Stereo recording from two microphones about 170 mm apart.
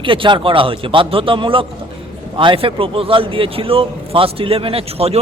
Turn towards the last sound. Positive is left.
turn(degrees=-35)  # may be behind; listen again after turning